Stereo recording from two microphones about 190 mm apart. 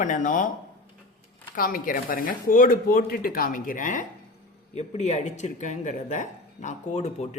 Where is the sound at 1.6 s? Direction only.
50° left (ahead or behind).